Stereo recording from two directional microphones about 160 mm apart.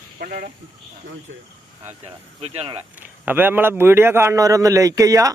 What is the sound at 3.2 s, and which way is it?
A man's voice, 10° right (ahead or behind).